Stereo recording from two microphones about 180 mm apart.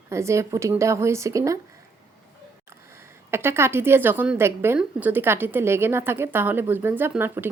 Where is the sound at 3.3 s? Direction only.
15° right (ahead or behind).